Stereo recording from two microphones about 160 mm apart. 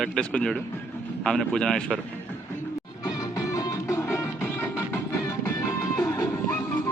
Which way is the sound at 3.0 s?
25° left (ahead or behind).